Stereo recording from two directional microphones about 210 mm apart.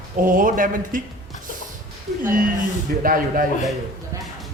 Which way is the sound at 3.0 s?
40° right (ahead or behind).